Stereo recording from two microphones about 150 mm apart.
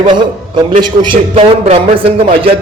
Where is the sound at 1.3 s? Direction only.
40° right (ahead or behind).